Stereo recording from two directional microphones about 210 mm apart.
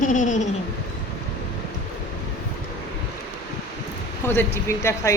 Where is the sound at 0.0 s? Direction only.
35° left (ahead or behind).